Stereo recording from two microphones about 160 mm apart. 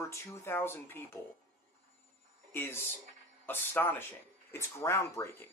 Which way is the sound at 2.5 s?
15° left (ahead or behind).